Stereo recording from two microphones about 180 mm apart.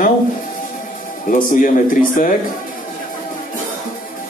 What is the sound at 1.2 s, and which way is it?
Speech, 50° left (ahead or behind).